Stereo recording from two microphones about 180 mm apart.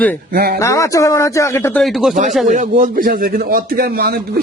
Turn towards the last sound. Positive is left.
turn(degrees=-60)  # may be behind; listen again after turning